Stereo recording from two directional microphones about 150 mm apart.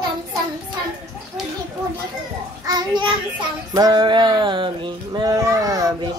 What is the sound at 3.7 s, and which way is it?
Music, 25° right (ahead or behind).